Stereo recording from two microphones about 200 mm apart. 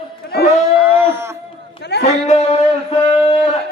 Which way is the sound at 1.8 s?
55° left (ahead or behind).